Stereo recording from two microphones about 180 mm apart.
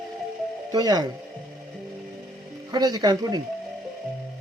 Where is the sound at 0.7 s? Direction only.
20° right (ahead or behind).